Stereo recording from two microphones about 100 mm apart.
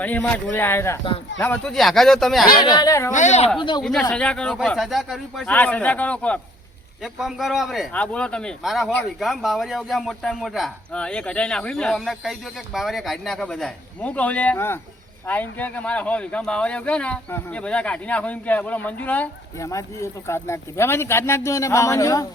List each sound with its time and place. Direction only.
0.0 s a man's voice: 15° left (ahead or behind); by 2.5 s centre (ahead or behind)
2.6 s speech: 40° left (ahead or behind)
3.6 s speech: 50° left (ahead or behind)
4.1 s a man's voice: 10° left (ahead or behind)
5.5 s speech: 15° left (ahead or behind)
7.0 s a man's voice: 5° right (ahead or behind)
7.9 s speech: 10° left (ahead or behind)
8.6 s a man's voice: centre (ahead or behind); by 19.3 s 15° left (ahead or behind)
19.5 s a man's voice: 30° left (ahead or behind)